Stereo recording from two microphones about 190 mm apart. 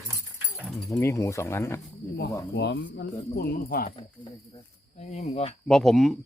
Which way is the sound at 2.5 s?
60° left (ahead or behind).